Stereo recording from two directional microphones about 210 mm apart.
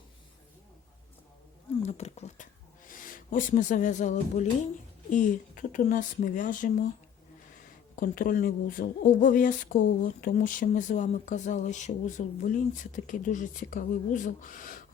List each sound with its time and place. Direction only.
1.8 s speech: 30° left (ahead or behind)
7.9 s speech: 40° left (ahead or behind)